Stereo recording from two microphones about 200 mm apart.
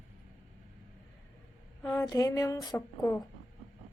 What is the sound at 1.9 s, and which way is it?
A woman's voice, 15° left (ahead or behind).